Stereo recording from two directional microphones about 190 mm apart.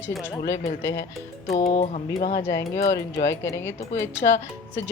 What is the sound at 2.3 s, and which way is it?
Music, 15° left (ahead or behind).